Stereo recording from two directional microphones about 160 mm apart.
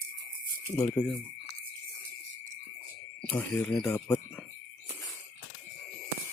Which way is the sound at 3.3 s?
5° left (ahead or behind).